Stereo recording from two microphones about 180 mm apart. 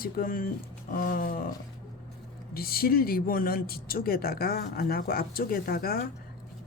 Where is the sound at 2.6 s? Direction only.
55° left (ahead or behind).